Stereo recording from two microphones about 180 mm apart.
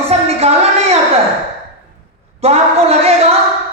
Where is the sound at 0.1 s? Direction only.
35° right (ahead or behind).